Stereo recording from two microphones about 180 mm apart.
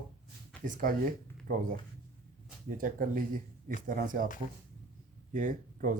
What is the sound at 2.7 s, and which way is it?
Speech, 50° right (ahead or behind).